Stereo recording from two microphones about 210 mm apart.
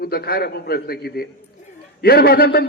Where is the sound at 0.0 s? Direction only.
45° left (ahead or behind).